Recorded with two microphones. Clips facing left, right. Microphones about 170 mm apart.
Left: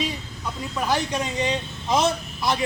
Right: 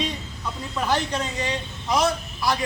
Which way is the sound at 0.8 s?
10° left (ahead or behind).